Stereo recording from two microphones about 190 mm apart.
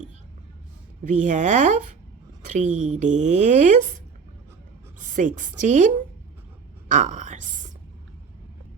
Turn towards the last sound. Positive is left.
turn(degrees=-40)  # may be behind; listen again after turning